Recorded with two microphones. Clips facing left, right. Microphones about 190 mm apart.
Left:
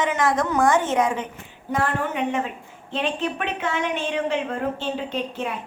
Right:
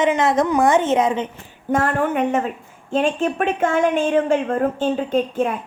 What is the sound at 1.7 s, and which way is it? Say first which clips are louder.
A woman's voice: right 5 dB; 50° right (ahead or behind).